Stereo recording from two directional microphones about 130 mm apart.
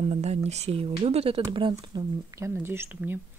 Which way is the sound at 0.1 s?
55° right (ahead or behind).